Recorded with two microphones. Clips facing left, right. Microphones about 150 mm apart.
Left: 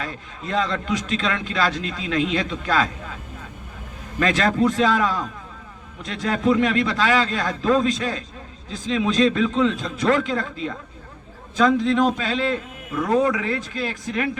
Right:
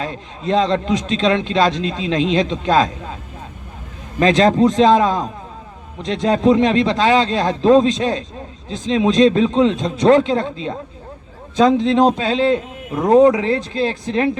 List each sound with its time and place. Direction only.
0.0 s a man's voice: 30° right (ahead or behind)
4.2 s a man's voice: 30° right (ahead or behind)